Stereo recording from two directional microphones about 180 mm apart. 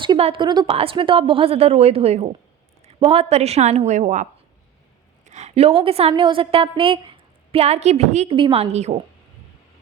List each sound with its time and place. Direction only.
0.0 s a woman's voice: 30° right (ahead or behind)